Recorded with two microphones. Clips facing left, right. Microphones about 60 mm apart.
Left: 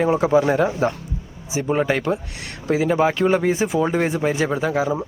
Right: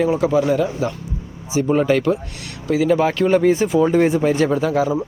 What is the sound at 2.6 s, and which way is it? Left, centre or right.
Speech, left.